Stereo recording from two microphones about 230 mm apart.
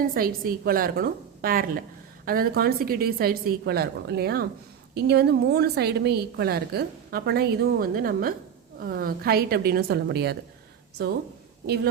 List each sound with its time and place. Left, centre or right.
0.1 s a woman's voice: right